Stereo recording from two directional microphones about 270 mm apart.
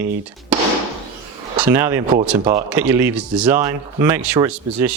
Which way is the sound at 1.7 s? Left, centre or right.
Centre.